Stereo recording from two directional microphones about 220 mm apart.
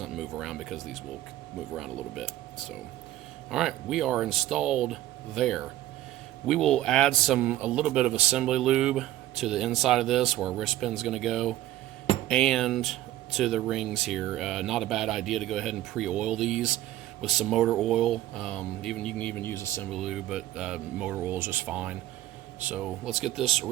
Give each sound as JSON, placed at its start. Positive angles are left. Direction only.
{"t": 0.0, "sound": "speech", "side_deg": 0}
{"t": 3.5, "sound": "speech", "side_deg": 0}
{"t": 19.9, "sound": "speech", "side_deg": 0}